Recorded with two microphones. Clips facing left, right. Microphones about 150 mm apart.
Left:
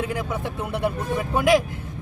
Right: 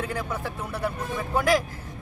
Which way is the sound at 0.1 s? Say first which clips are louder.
Left 3 dB; 20° left (ahead or behind).